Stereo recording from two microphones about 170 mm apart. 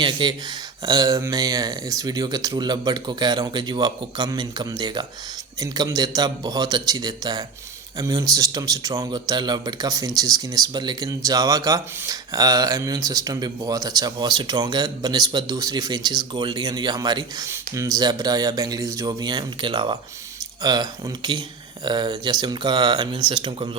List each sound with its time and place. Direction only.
0.0 s speech: 30° right (ahead or behind)